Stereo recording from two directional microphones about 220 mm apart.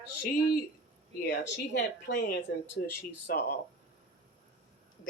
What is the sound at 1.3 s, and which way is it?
Speech, 55° left (ahead or behind).